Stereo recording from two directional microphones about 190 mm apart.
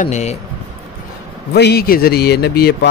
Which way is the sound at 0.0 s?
35° left (ahead or behind).